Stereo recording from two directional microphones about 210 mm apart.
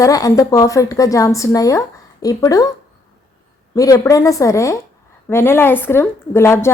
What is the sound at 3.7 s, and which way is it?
A woman's voice, 15° left (ahead or behind).